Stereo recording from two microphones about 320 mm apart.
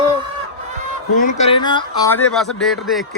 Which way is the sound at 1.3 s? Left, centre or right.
Centre.